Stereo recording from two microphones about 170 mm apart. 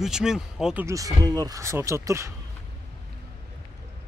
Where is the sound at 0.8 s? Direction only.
20° right (ahead or behind).